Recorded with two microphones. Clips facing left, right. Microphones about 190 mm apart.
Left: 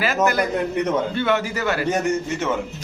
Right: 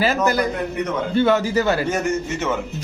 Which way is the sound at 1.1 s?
35° right (ahead or behind).